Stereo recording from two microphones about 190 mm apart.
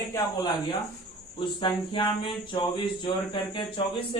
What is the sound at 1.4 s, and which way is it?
Speech, 25° left (ahead or behind).